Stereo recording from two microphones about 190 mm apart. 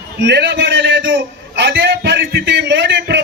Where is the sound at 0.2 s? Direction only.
65° right (ahead or behind).